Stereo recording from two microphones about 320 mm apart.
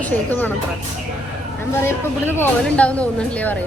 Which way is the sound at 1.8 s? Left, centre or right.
Centre.